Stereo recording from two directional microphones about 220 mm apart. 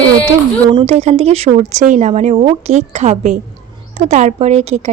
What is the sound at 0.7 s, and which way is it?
A woman's voice, 30° right (ahead or behind).